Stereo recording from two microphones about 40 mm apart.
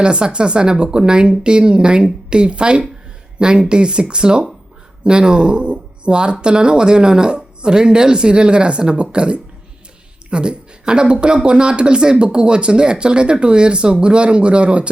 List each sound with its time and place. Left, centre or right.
0.0 s speech: right